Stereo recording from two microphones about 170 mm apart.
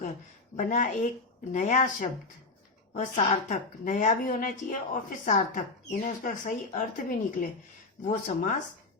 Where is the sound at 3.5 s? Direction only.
45° left (ahead or behind).